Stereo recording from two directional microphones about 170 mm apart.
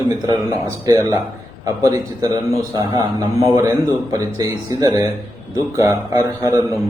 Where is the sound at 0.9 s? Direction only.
25° right (ahead or behind).